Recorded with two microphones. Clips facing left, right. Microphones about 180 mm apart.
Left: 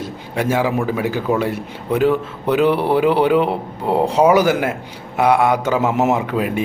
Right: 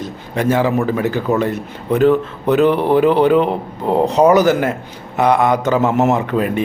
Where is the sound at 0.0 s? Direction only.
10° left (ahead or behind).